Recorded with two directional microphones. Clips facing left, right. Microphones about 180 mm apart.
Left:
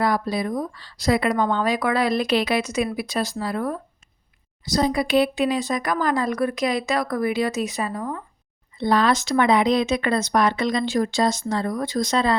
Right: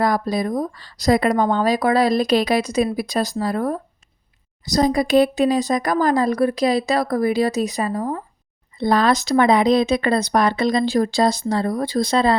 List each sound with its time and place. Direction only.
0.0 s speech: 40° right (ahead or behind)